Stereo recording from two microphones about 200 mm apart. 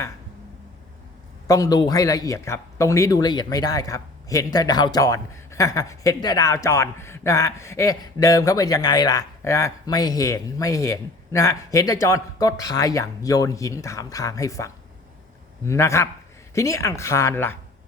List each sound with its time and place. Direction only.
1.5 s speech: 20° left (ahead or behind)